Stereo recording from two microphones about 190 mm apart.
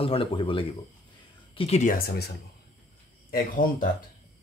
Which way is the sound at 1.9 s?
50° left (ahead or behind).